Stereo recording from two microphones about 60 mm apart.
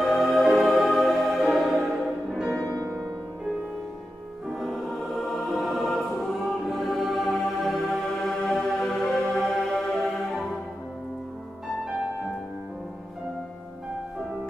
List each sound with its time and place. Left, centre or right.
0.0 s music: centre
2.7 s music: right
4.6 s choir: centre